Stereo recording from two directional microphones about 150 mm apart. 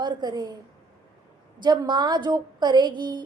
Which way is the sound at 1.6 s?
30° right (ahead or behind).